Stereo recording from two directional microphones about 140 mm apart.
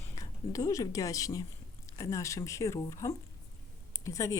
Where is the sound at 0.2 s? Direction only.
25° left (ahead or behind).